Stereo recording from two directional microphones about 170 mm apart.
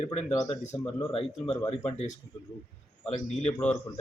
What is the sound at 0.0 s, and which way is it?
Speech, 40° left (ahead or behind).